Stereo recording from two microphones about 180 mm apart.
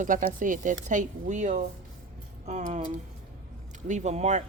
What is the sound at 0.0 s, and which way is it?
Speech, 45° right (ahead or behind).